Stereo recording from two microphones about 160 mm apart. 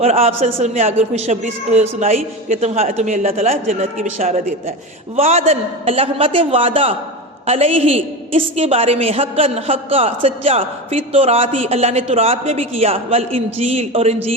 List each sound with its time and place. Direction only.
0.0 s a woman's voice: 40° right (ahead or behind)